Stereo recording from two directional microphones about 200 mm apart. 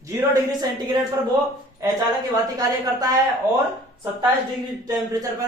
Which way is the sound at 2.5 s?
20° right (ahead or behind).